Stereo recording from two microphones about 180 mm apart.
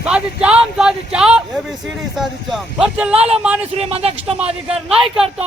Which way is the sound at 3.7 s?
35° right (ahead or behind).